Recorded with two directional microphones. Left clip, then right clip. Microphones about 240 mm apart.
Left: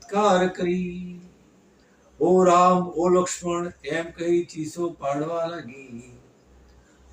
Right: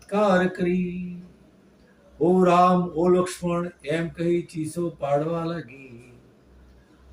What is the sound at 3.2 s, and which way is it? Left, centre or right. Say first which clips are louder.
Speech: even; centre.